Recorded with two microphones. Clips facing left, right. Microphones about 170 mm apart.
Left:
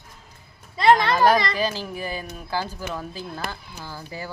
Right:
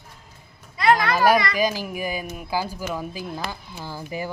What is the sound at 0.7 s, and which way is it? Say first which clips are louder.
Speech: left 2 dB; 25° left (ahead or behind).